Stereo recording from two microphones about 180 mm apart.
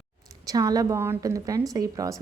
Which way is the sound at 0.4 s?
20° right (ahead or behind).